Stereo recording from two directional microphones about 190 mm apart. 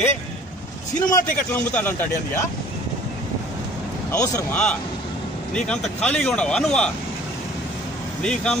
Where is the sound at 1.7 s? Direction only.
10° left (ahead or behind).